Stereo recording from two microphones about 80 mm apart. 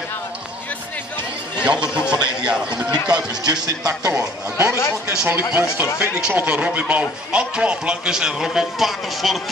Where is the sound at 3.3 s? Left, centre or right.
Right.